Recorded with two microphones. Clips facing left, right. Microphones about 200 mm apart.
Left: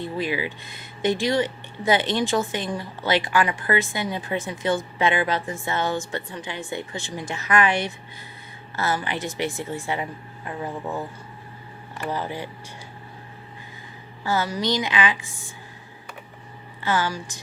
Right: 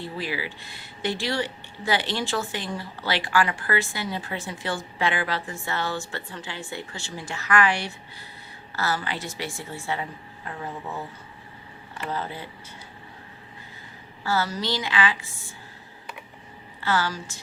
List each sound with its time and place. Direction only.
0.0 s a woman's voice: 20° left (ahead or behind)
12.0 s a woman's voice: 15° left (ahead or behind)
14.3 s a woman's voice: 15° left (ahead or behind)
16.8 s a woman's voice: 15° left (ahead or behind)